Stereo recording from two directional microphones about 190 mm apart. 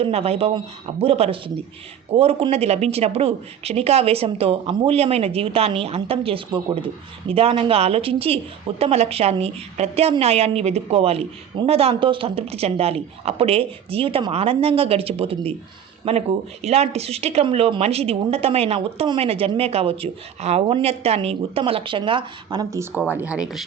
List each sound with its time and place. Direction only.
0.0 s speech: 30° right (ahead or behind); by 23.6 s centre (ahead or behind)